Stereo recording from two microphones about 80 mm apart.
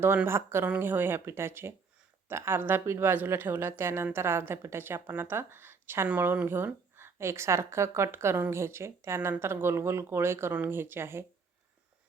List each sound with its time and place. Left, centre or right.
0.3 s a woman's voice: right